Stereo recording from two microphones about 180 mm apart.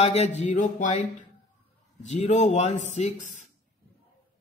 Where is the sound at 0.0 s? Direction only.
35° left (ahead or behind).